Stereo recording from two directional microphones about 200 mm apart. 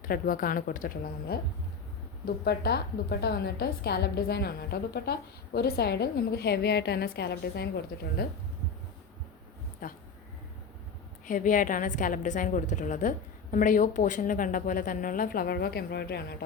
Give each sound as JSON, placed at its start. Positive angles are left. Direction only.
{"t": 0.0, "sound": "a woman's voice", "side_deg": 45}
{"t": 9.8, "sound": "a woman's voice", "side_deg": 45}
{"t": 11.3, "sound": "a woman's voice", "side_deg": 40}